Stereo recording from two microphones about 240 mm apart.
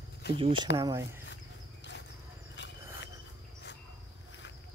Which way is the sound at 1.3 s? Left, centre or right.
Left.